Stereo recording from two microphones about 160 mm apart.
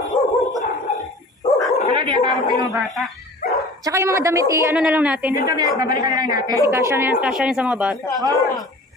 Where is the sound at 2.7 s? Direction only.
Centre (ahead or behind).